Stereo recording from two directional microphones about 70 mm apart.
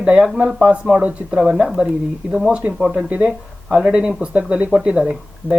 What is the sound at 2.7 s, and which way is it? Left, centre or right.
Speech, centre.